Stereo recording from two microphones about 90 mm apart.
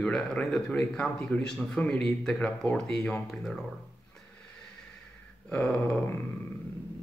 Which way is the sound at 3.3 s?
Centre (ahead or behind).